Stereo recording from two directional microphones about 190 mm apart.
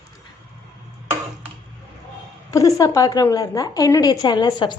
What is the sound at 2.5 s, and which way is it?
A woman's voice, 20° left (ahead or behind).